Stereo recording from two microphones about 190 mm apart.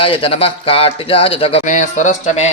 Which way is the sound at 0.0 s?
30° left (ahead or behind).